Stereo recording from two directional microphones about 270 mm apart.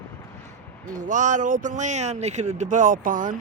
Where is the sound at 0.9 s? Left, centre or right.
Right.